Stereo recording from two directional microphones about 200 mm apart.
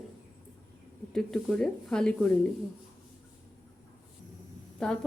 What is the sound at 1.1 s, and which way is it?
Speech, 5° left (ahead or behind).